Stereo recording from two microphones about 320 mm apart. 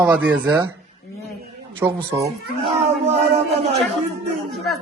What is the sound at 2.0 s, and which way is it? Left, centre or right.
Speech, centre.